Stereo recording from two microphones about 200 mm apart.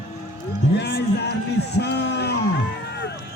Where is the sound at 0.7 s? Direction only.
60° left (ahead or behind).